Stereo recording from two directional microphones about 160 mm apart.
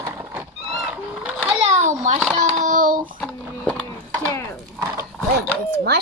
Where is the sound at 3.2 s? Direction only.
10° left (ahead or behind).